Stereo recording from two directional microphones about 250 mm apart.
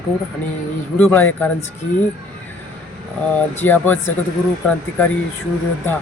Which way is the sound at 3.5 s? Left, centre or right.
Centre.